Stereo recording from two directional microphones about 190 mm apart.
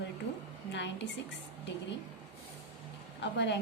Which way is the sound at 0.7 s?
70° left (ahead or behind).